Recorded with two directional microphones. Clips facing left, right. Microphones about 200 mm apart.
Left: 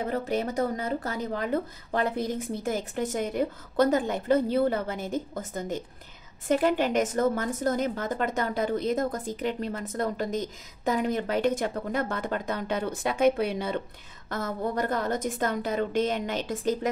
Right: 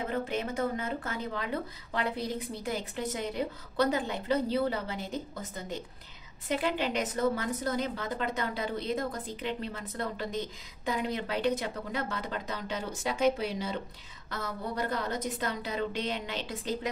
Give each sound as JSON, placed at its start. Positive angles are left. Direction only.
{"t": 0.1, "sound": "a woman's voice", "side_deg": 40}